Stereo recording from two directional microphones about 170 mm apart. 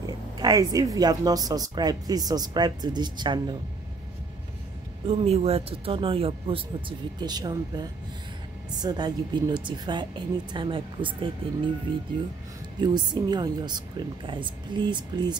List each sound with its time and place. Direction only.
0.4 s speech: 20° right (ahead or behind)
5.0 s speech: 35° right (ahead or behind)
12.7 s speech: 25° right (ahead or behind)